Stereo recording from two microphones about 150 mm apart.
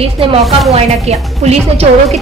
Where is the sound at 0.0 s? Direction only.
40° right (ahead or behind).